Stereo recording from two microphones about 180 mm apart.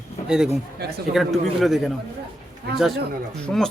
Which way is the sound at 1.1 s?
Centre (ahead or behind).